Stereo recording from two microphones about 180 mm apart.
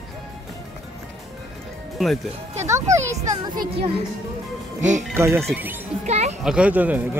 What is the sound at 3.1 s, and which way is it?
Speech, 20° right (ahead or behind).